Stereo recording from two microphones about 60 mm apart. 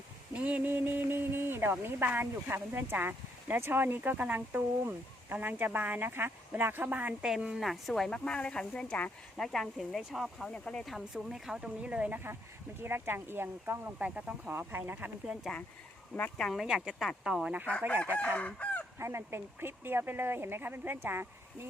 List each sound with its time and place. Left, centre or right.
0.3 s speech: right
0.7 s speech: right
6.8 s speech: right
7.6 s speech: centre
8.1 s speech: centre
9.4 s speech: centre
10.5 s speech: centre; by 12.2 s right
12.8 s speech: right
14.0 s speech: right
14.7 s speech: right
16.6 s speech: centre
17.7 s chicken: centre
18.9 s speech: right